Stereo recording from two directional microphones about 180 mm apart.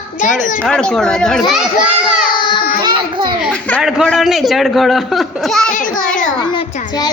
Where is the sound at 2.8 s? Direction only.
25° right (ahead or behind).